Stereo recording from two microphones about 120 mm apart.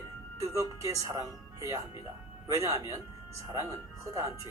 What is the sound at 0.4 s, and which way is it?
Speech, 25° right (ahead or behind).